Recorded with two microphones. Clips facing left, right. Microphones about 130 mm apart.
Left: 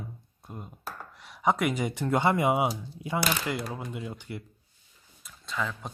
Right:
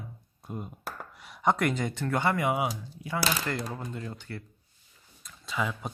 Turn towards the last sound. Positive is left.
turn(degrees=-10)  # may be behind; listen again after turning